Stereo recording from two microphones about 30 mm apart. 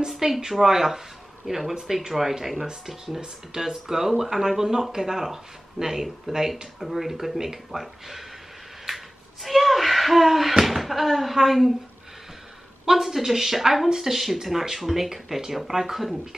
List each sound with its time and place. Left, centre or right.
0.2 s speech: centre
3.2 s speech: right
8.8 s a sound: centre
10.6 s slam: centre
11.3 s speech: centre
12.8 s speech: centre